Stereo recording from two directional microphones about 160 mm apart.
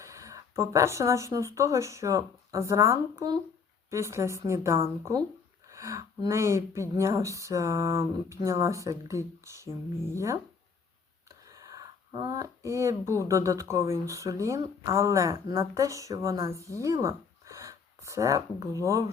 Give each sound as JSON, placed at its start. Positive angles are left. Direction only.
{"t": 0.0, "sound": "speech", "side_deg": -20}
{"t": 11.5, "sound": "speech", "side_deg": -20}